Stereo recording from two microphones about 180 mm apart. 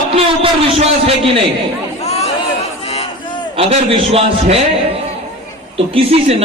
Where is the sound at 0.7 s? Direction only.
30° right (ahead or behind).